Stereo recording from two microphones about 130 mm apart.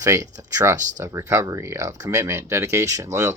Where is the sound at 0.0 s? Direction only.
25° right (ahead or behind).